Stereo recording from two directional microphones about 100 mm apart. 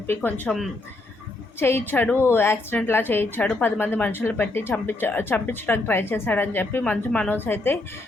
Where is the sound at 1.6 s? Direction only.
25° left (ahead or behind).